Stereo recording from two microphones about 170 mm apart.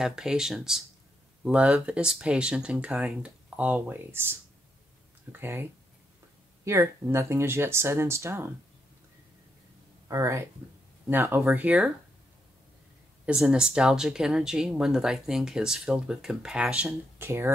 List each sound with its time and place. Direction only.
0.0 s speech: 5° right (ahead or behind)
10.0 s speech: 20° right (ahead or behind)
13.2 s speech: 5° right (ahead or behind)